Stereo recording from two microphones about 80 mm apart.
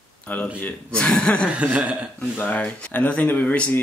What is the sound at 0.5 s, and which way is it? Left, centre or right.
Speech, centre.